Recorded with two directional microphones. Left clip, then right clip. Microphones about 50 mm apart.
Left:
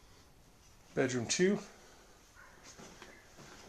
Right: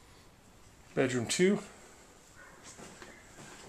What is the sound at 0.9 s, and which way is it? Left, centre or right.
Speech, left.